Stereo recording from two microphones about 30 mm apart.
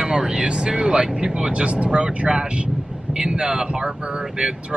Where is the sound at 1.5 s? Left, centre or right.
Right.